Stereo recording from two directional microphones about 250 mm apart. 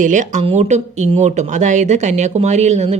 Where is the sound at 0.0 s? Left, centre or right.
Right.